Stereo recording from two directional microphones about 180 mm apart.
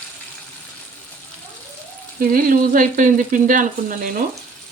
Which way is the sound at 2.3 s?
50° right (ahead or behind).